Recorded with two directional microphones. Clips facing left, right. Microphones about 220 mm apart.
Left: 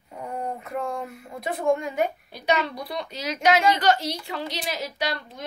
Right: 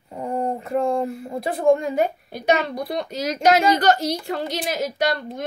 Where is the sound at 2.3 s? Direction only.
50° right (ahead or behind).